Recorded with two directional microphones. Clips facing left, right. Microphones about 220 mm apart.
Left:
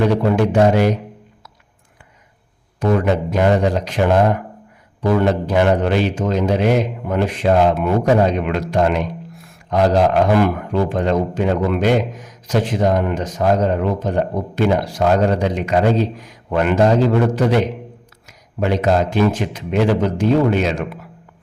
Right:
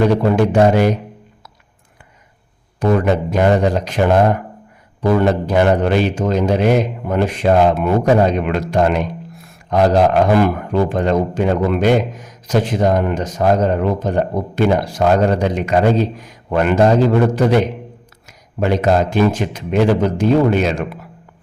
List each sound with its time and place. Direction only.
0.0 s a man's voice: 45° right (ahead or behind)
2.8 s a man's voice: 45° right (ahead or behind)